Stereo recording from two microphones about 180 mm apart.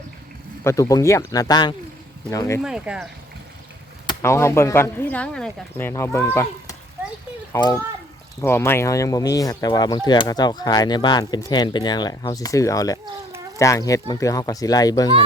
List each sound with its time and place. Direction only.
0.6 s speech: 15° left (ahead or behind)
2.6 s speech: 5° right (ahead or behind)
4.2 s speech: 15° left (ahead or behind)